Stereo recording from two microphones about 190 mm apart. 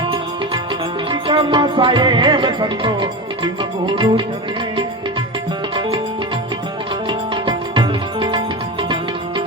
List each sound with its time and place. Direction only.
1.1 s music: 25° right (ahead or behind)
7.1 s music: 25° right (ahead or behind)